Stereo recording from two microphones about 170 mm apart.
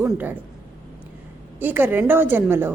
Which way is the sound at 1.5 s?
10° right (ahead or behind).